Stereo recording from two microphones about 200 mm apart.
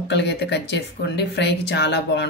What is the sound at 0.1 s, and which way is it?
Speech, 55° left (ahead or behind).